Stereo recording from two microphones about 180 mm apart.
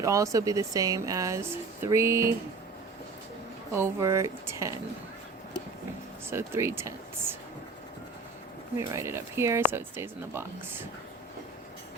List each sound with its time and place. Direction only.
0.0 s speech: 15° right (ahead or behind)
3.7 s speech: 15° right (ahead or behind)
6.3 s speech: 15° right (ahead or behind)
8.9 s speech: 15° right (ahead or behind)